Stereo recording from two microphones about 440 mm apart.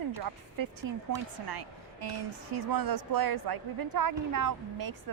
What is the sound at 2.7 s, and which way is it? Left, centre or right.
A woman's voice, right.